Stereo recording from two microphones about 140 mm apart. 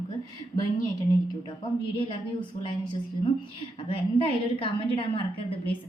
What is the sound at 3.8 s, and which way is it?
A woman's voice, 40° left (ahead or behind).